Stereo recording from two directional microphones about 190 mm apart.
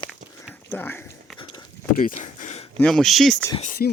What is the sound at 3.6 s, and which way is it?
Speech, 50° left (ahead or behind).